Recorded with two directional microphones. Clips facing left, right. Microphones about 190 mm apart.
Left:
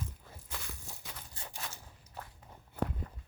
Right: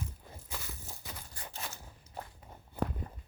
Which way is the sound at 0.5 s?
Centre (ahead or behind).